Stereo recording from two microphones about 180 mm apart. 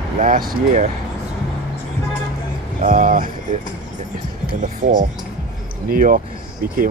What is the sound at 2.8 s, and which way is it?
Speech, 45° right (ahead or behind).